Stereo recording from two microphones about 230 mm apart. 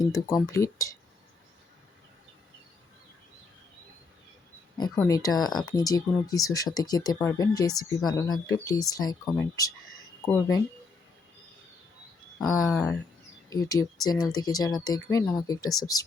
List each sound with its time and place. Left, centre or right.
0.0 s speech: centre
4.8 s speech: centre
12.4 s speech: centre